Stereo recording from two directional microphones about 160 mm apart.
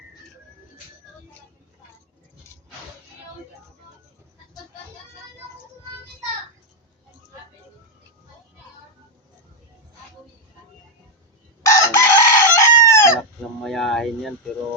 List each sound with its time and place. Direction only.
11.6 s chicken: 20° left (ahead or behind)
13.6 s speech: centre (ahead or behind)